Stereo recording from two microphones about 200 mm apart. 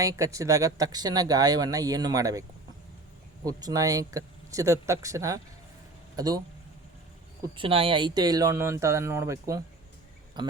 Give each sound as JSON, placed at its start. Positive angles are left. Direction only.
{"t": 0.0, "sound": "speech", "side_deg": -15}
{"t": 3.4, "sound": "speech", "side_deg": -15}
{"t": 7.5, "sound": "speech", "side_deg": -25}